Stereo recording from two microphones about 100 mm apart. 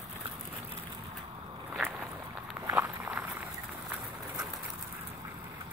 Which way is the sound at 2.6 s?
25° right (ahead or behind).